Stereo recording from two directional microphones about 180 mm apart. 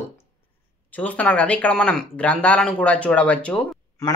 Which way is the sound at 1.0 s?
10° left (ahead or behind).